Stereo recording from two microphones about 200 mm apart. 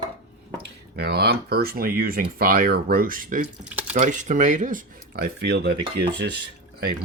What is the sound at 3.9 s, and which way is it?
Speech, 40° right (ahead or behind).